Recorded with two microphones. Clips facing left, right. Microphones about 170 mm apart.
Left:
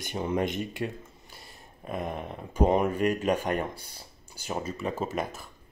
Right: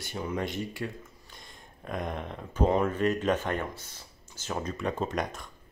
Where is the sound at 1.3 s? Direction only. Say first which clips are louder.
Left 1 dB; 5° left (ahead or behind).